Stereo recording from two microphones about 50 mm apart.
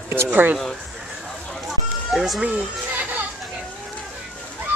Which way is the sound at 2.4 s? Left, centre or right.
Right.